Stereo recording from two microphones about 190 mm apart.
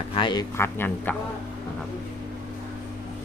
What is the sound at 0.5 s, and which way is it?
Speech, 10° left (ahead or behind).